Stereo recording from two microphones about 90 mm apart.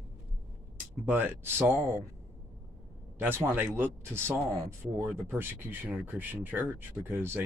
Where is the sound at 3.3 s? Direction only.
25° right (ahead or behind).